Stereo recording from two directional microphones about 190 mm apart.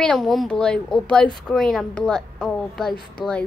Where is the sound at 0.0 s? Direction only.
5° left (ahead or behind).